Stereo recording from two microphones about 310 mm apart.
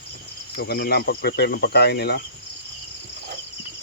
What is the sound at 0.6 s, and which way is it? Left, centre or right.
Speech, left.